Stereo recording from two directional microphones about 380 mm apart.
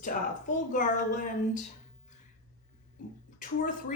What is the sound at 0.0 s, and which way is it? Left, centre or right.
A woman's voice, centre.